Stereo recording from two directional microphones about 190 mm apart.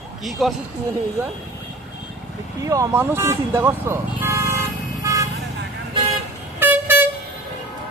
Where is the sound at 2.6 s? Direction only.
15° right (ahead or behind).